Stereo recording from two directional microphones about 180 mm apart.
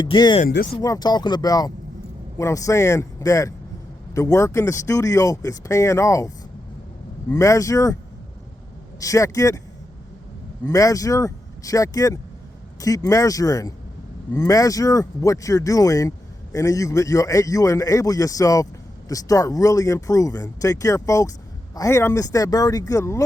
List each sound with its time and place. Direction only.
0.0 s speech: 25° left (ahead or behind)
9.0 s speech: 20° left (ahead or behind)
10.7 s speech: 20° left (ahead or behind)